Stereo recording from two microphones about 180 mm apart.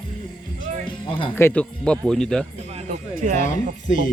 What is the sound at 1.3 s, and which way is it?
Speech, 10° left (ahead or behind).